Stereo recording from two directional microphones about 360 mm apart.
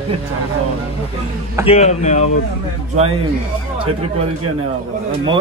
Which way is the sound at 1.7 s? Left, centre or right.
Centre.